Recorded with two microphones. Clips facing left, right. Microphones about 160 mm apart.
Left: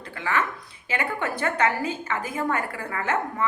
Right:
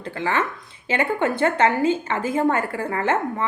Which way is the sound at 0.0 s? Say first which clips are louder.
Right 3 dB; 30° right (ahead or behind).